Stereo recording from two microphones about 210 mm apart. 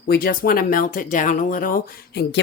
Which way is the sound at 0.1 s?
45° left (ahead or behind).